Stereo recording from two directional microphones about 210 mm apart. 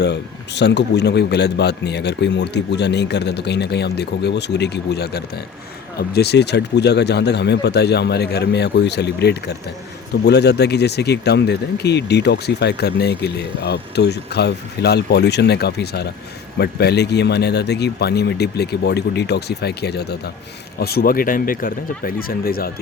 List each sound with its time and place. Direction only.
0.0 s speech: 55° left (ahead or behind)